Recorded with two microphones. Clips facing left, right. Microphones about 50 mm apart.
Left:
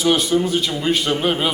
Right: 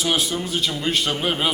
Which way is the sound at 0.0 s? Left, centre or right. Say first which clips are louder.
Left 6 dB; centre.